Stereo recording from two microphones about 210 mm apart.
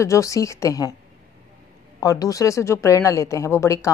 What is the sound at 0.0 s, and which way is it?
Speech, 15° left (ahead or behind).